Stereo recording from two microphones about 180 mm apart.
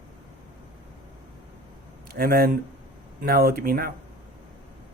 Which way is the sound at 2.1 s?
55° right (ahead or behind).